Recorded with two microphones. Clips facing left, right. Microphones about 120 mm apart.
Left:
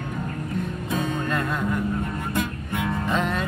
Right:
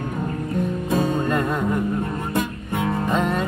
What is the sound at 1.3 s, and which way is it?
Music, 15° right (ahead or behind).